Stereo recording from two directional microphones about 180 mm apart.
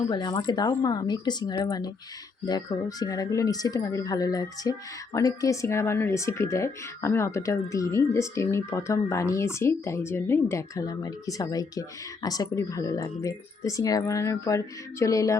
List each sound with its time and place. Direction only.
0.1 s speech: 25° left (ahead or behind)